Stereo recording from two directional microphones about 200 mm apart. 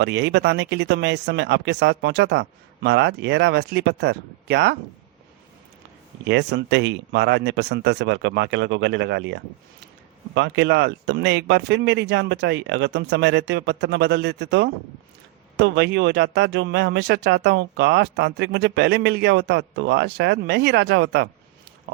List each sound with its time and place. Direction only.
0.0 s speech: 60° right (ahead or behind)
6.2 s speech: 60° right (ahead or behind)